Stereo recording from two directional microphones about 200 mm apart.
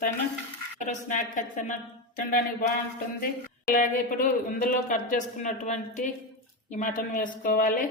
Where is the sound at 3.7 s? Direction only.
40° left (ahead or behind).